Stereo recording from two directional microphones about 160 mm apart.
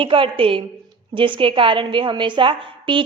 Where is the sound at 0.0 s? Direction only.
35° right (ahead or behind).